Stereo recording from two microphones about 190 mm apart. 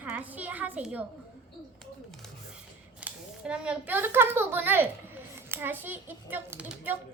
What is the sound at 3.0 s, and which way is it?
Speech, 5° right (ahead or behind).